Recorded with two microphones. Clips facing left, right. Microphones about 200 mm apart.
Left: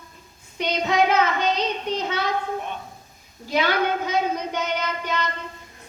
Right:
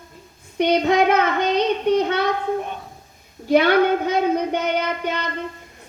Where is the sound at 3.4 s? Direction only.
60° right (ahead or behind).